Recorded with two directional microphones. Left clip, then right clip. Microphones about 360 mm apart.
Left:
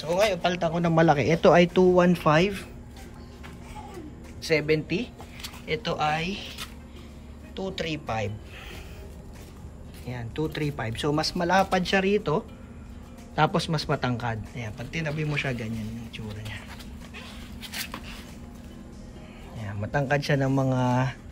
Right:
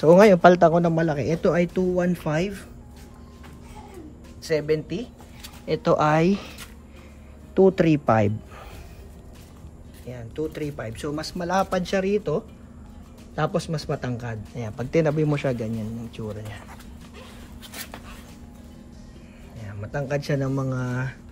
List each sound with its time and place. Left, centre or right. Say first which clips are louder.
0.5 s speech: right 10 dB; centre
4.4 s speech: even; centre
7.5 s speech: right 13 dB; centre
10.0 s speech: right 1 dB; centre
13.4 s speech: left 2 dB; centre
17.6 s dog: left 4 dB; centre
20.0 s speech: left 1 dB; centre